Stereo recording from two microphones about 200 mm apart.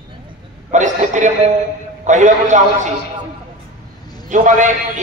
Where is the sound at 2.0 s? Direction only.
40° right (ahead or behind).